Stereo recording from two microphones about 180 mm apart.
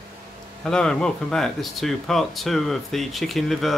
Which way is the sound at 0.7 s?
5° left (ahead or behind).